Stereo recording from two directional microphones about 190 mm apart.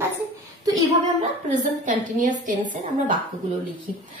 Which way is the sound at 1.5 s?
40° right (ahead or behind).